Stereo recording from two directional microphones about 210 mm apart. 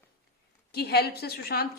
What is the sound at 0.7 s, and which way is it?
Speech, 50° left (ahead or behind).